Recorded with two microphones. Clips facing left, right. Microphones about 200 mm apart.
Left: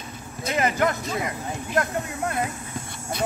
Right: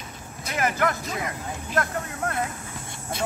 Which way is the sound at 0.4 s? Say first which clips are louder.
Left 2 dB; 20° left (ahead or behind).